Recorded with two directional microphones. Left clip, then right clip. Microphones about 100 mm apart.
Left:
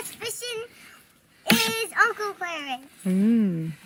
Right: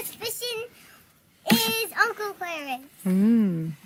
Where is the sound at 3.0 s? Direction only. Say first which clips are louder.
Right 1 dB; centre (ahead or behind).